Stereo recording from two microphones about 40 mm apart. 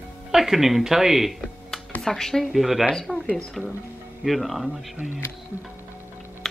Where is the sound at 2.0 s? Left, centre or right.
Centre.